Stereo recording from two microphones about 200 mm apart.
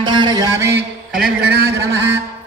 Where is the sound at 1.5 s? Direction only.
55° right (ahead or behind).